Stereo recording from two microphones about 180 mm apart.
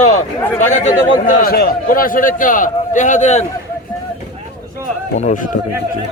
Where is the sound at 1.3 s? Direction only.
50° left (ahead or behind).